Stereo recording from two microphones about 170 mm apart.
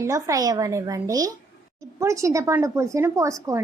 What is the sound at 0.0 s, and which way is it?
A woman's voice, 20° right (ahead or behind).